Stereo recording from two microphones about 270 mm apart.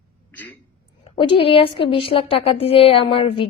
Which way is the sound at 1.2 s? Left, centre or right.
Centre.